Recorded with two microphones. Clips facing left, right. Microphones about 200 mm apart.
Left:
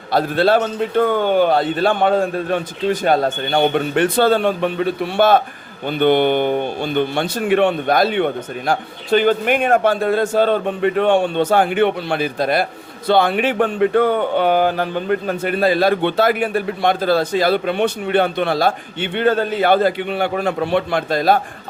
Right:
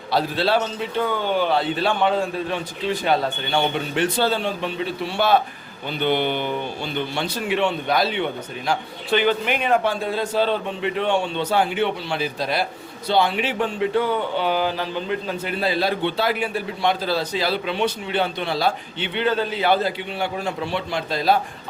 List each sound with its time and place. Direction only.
0.1 s speech: 50° left (ahead or behind)